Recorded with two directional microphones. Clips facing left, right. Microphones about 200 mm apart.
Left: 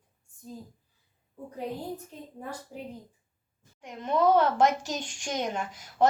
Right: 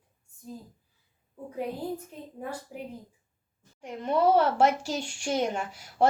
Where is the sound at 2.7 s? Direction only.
10° right (ahead or behind).